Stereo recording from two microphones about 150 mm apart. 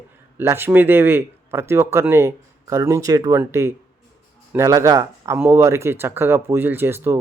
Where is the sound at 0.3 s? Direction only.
15° right (ahead or behind).